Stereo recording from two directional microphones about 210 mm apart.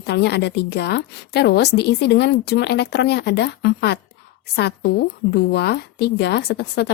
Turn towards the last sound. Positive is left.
turn(degrees=50)  # may be behind; listen again after turning